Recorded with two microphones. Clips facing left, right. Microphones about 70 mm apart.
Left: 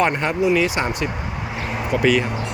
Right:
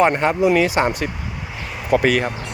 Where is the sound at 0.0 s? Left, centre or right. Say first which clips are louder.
Right 3 dB; right.